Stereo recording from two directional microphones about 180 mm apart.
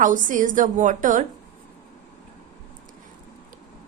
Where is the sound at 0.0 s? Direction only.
45° right (ahead or behind).